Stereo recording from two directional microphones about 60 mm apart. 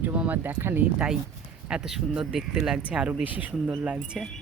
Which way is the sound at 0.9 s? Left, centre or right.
Centre.